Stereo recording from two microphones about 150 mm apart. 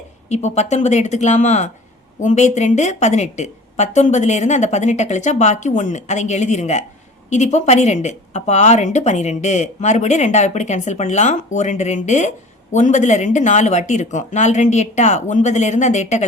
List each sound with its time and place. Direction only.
0.3 s speech: 50° left (ahead or behind)